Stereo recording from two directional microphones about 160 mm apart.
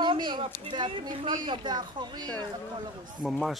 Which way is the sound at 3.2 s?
Centre (ahead or behind).